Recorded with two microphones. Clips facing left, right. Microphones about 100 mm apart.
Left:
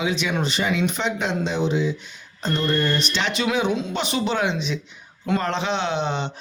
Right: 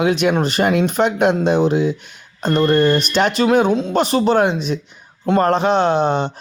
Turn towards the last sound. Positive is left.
turn(degrees=-50)  # may be behind; listen again after turning